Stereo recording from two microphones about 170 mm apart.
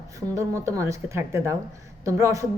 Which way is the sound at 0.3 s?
20° right (ahead or behind).